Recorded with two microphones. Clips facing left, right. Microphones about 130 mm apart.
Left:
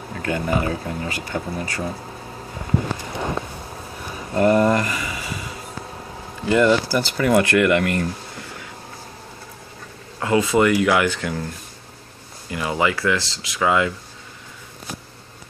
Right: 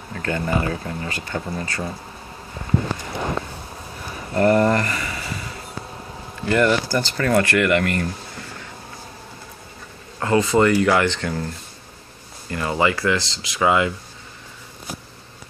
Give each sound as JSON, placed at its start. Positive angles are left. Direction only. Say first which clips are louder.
{"t": 0.2, "sound": "speech", "louder": "left 1 dB", "side_deg": 15}
{"t": 4.3, "sound": "a sound", "louder": "even", "side_deg": 15}
{"t": 6.4, "sound": "speech", "louder": "left 2 dB", "side_deg": 15}
{"t": 10.2, "sound": "speech", "louder": "even", "side_deg": 10}
{"t": 12.4, "sound": "speech", "louder": "right 1 dB", "side_deg": 10}